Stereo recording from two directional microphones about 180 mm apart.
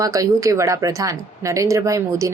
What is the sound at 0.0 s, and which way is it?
A woman's voice, 20° right (ahead or behind).